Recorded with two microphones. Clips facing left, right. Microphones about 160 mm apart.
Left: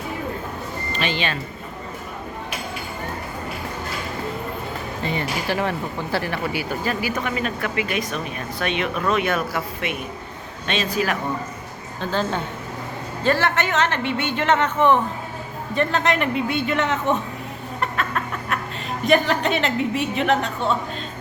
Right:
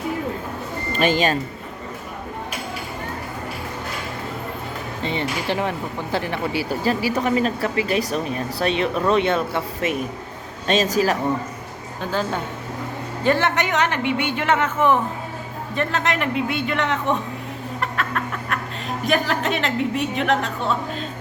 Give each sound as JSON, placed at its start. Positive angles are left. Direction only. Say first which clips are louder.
{"t": 0.9, "sound": "speech", "louder": "right 7 dB", "side_deg": -45}
{"t": 5.0, "sound": "speech", "louder": "right 1 dB", "side_deg": -25}
{"t": 9.8, "sound": "speech", "louder": "right 4 dB", "side_deg": -40}
{"t": 13.2, "sound": "a woman's voice", "louder": "right 1 dB", "side_deg": -15}
{"t": 17.7, "sound": "a sound", "louder": "left 1 dB", "side_deg": 0}
{"t": 19.0, "sound": "a woman's voice", "louder": "left 3 dB", "side_deg": 0}